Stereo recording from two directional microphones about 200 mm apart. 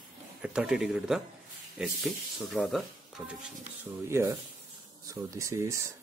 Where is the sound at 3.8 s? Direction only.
15° right (ahead or behind).